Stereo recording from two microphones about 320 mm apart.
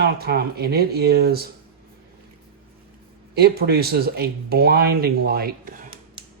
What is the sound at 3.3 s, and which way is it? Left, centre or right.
Speech, right.